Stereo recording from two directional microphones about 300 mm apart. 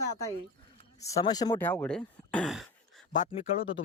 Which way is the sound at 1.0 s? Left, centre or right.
Centre.